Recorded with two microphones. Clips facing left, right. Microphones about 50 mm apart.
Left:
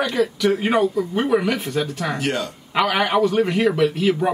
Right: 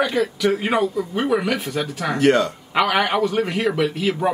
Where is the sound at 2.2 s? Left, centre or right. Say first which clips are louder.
Right 12 dB; right.